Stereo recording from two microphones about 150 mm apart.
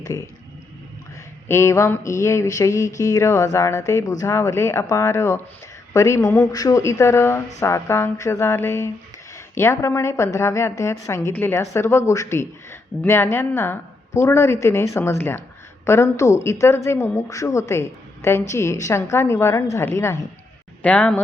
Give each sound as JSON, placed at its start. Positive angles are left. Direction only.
{"t": 0.0, "sound": "speech", "side_deg": 20}
{"t": 1.5, "sound": "a woman's voice", "side_deg": 15}